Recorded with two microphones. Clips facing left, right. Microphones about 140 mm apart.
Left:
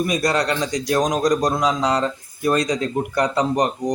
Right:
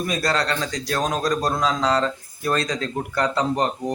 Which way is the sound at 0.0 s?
15° left (ahead or behind).